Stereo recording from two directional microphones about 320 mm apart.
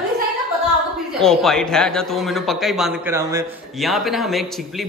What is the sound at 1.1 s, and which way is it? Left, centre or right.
A man's voice, centre.